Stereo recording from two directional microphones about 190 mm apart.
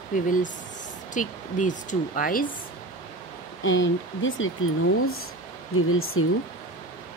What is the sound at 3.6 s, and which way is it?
Speech, 90° left.